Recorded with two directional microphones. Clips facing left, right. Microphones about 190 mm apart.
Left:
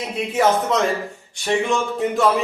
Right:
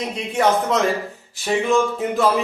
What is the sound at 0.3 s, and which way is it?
A man's voice, centre (ahead or behind).